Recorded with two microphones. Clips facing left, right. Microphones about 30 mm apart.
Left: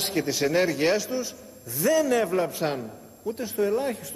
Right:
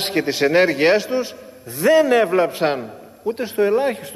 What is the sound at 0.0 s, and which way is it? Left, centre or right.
A man's voice, right.